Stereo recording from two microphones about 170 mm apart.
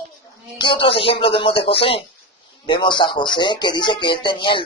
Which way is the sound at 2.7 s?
25° left (ahead or behind).